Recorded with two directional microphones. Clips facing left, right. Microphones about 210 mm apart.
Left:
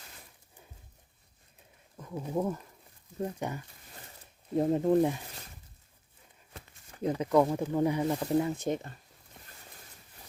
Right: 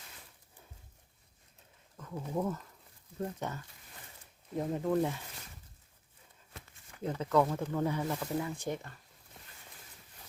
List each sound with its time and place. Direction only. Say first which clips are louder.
2.0 s speech: left 3 dB; 15° left (ahead or behind)
4.5 s speech: left 6 dB; 30° left (ahead or behind)
7.0 s speech: left 4 dB; 15° left (ahead or behind)
8.2 s speech: left 7 dB; 30° left (ahead or behind)